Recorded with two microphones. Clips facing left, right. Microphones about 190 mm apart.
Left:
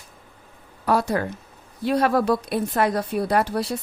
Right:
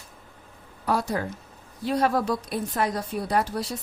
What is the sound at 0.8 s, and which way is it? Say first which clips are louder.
A woman's voice: left 4 dB; 65° left (ahead or behind).